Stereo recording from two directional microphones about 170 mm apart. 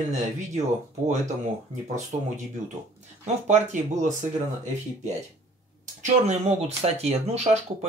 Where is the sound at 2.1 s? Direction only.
45° right (ahead or behind).